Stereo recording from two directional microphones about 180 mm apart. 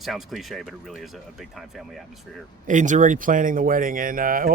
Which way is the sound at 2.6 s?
45° right (ahead or behind).